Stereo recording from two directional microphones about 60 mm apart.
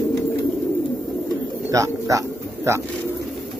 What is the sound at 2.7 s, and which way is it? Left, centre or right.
Speech, right.